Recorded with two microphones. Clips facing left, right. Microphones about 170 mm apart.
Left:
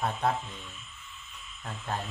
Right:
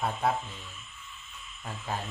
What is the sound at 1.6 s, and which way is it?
Speech, 5° right (ahead or behind).